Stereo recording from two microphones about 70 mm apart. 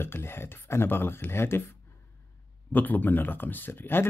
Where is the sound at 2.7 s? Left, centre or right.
Left.